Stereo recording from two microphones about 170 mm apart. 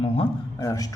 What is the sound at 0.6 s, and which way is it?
Speech, 20° left (ahead or behind).